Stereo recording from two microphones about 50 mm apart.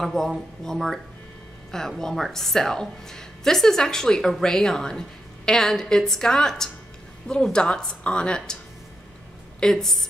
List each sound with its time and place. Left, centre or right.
0.0 s a woman's voice: centre
9.6 s a woman's voice: centre